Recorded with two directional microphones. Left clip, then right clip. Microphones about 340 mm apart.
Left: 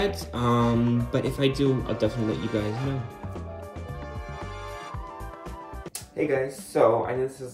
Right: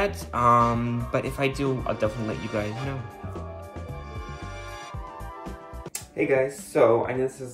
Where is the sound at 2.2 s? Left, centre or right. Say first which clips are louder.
Left 1 dB; centre.